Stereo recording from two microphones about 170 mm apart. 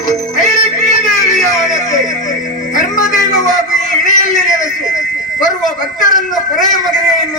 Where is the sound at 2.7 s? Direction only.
50° left (ahead or behind).